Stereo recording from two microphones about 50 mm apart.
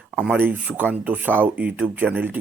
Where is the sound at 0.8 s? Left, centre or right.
Right.